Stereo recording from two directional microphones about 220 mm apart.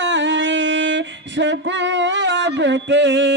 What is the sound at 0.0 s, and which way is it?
Singing, 55° right (ahead or behind).